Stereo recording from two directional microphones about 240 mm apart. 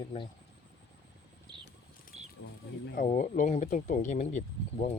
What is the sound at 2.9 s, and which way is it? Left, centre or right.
Speech, left.